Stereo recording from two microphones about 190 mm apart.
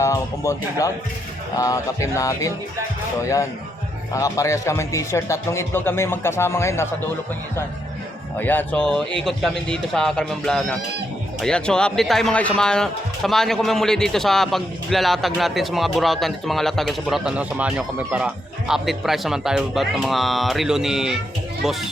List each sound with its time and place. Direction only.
0.0 s a man's voice: 15° left (ahead or behind)
8.4 s speech: 10° left (ahead or behind)